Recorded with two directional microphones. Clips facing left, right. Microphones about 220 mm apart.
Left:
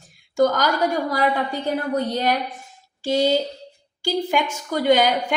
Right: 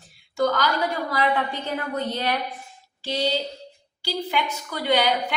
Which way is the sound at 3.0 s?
45° left (ahead or behind).